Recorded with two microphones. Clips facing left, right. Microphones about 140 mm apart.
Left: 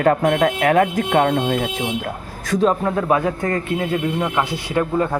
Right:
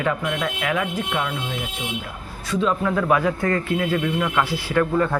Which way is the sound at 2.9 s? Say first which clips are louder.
Left 1 dB; 25° left (ahead or behind).